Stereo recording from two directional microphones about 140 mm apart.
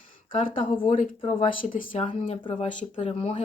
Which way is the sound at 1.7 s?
70° left (ahead or behind).